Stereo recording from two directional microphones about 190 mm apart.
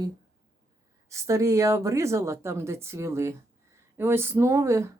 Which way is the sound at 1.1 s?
15° right (ahead or behind).